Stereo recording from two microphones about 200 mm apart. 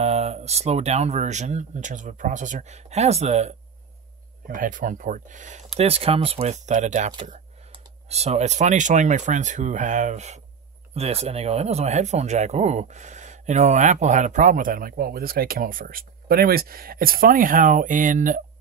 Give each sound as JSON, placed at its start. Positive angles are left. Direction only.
{"t": 0.0, "sound": "speech", "side_deg": -30}